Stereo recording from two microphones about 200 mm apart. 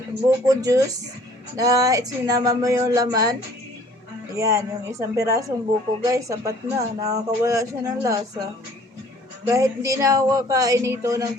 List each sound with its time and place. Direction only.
0.4 s speech: 15° right (ahead or behind)
4.4 s speech: 15° right (ahead or behind)
9.5 s speech: 15° right (ahead or behind)